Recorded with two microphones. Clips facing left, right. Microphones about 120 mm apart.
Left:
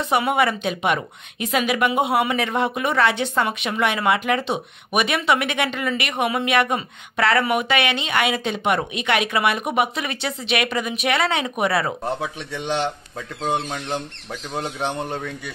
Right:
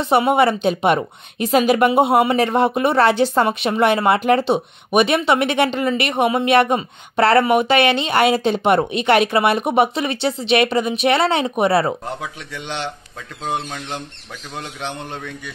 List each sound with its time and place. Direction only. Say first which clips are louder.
0.0 s a woman's voice: right 5 dB; 30° right (ahead or behind)
13.7 s speech: left 2 dB; 15° left (ahead or behind)